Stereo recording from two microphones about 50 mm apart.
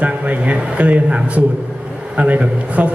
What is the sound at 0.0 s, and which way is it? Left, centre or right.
A man's voice, right.